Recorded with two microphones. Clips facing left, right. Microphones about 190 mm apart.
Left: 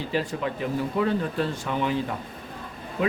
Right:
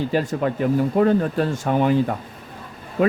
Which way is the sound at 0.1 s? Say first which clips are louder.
Right 6 dB; 45° right (ahead or behind).